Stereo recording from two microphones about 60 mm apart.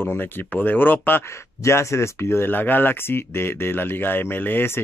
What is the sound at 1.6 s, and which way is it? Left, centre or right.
Speech, left.